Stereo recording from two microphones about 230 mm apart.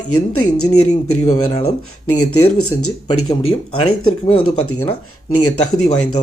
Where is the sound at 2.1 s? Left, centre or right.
Left.